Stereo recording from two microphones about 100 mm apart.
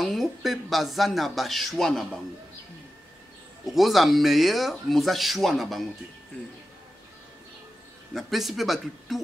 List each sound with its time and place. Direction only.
0.0 s speech: centre (ahead or behind)
3.6 s speech: centre (ahead or behind)
8.1 s speech: centre (ahead or behind)